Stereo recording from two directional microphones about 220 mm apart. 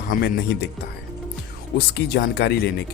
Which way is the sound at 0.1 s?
45° left (ahead or behind).